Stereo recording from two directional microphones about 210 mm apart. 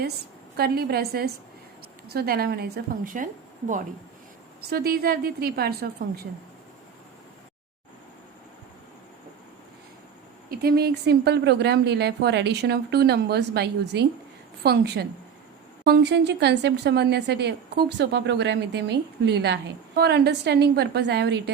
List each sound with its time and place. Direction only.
0.5 s a woman's voice: 50° right (ahead or behind)
4.7 s a woman's voice: 50° right (ahead or behind)
10.5 s a woman's voice: 45° right (ahead or behind)